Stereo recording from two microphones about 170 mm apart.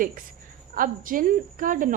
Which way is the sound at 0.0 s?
55° right (ahead or behind).